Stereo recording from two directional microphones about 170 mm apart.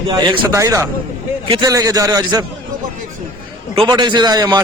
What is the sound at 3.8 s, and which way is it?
Speech, 25° right (ahead or behind).